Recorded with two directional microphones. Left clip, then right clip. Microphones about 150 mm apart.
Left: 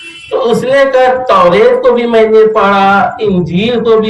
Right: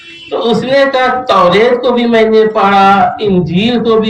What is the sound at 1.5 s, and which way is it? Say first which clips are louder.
A woman's voice: left 2 dB; 25° left (ahead or behind).